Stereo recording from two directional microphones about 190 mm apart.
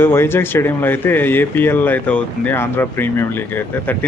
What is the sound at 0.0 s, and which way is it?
Speech, 10° left (ahead or behind).